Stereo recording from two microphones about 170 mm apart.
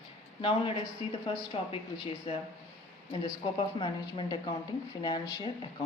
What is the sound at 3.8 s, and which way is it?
A woman's voice, 25° left (ahead or behind).